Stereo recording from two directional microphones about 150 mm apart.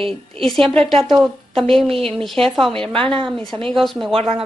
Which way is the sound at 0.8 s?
40° right (ahead or behind).